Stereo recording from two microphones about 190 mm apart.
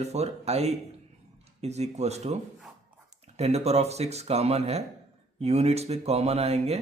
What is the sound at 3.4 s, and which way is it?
Speech, 35° right (ahead or behind).